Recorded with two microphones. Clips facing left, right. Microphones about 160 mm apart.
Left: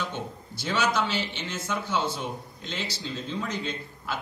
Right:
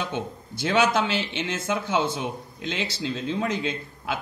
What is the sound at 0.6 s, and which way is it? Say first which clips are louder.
Speech: right 5 dB; 55° right (ahead or behind).